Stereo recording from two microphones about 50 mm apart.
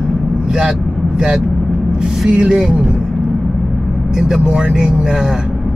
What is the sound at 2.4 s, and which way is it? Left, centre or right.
Speech, centre.